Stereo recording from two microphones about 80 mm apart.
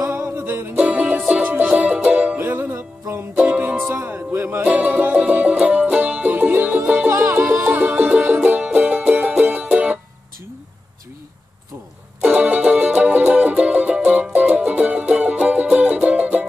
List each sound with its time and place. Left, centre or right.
0.0 s music: right
0.8 s music: centre
2.3 s music: right
3.3 s music: centre
12.2 s music: centre